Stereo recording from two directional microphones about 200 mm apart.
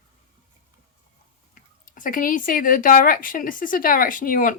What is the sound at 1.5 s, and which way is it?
Speech, 40° left (ahead or behind).